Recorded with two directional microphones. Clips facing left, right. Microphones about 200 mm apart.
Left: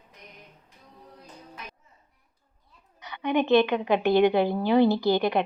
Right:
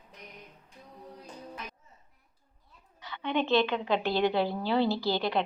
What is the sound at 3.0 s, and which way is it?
A woman's voice, 15° left (ahead or behind).